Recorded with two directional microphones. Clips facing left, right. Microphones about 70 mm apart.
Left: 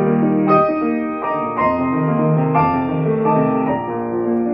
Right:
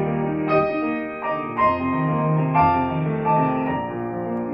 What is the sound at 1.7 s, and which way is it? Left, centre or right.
Music, left.